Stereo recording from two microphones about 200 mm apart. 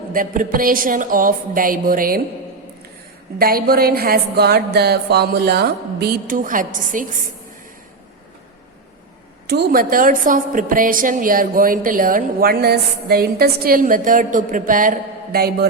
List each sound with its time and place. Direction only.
0.1 s a woman's voice: 45° right (ahead or behind)
3.3 s a woman's voice: 50° right (ahead or behind)
9.5 s a woman's voice: 50° right (ahead or behind)